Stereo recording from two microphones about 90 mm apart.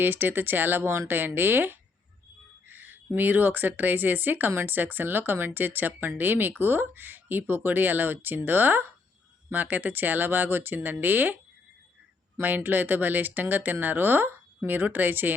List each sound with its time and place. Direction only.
0.0 s speech: 25° right (ahead or behind)
12.4 s speech: 20° right (ahead or behind)